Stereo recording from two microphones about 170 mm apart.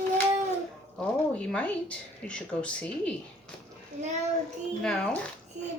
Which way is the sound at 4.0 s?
45° right (ahead or behind).